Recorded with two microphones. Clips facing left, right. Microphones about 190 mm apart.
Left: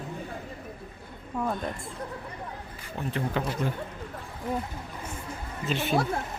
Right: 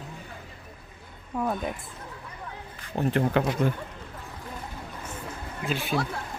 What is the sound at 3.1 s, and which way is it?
Speech, 65° right (ahead or behind).